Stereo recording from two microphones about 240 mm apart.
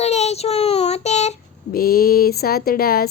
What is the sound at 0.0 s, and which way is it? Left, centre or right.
A child's voice, left.